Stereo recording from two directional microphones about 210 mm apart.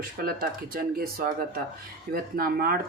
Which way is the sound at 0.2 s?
45° right (ahead or behind).